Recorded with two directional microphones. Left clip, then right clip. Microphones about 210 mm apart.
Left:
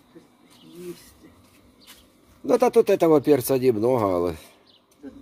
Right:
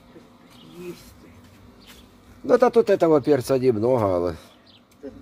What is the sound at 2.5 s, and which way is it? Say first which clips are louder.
Speech: right 1 dB; 20° left (ahead or behind).